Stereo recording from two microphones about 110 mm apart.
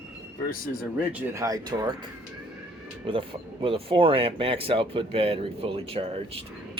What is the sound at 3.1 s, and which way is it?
A man's voice, 50° right (ahead or behind).